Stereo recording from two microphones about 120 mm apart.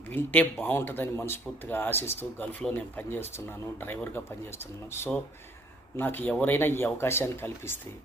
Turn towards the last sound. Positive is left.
turn(degrees=20)  # may be behind; listen again after turning